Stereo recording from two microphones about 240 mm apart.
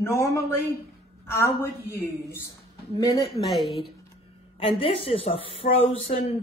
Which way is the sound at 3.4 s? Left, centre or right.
Centre.